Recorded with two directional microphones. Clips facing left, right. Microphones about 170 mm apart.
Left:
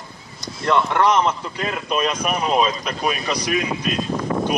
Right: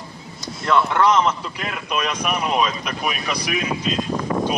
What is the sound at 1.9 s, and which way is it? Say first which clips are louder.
Speech: left 1 dB; 35° left (ahead or behind).